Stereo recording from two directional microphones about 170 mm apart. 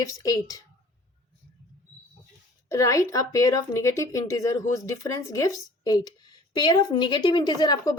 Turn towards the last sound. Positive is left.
turn(degrees=20)  # may be behind; listen again after turning